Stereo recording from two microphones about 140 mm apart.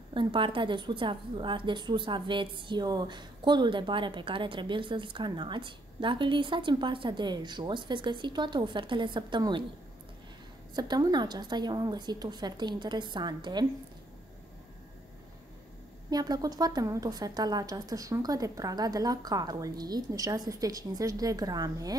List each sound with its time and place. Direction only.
0.1 s a woman's voice: 35° right (ahead or behind)
10.7 s a woman's voice: 30° right (ahead or behind)
16.1 s a woman's voice: 30° right (ahead or behind)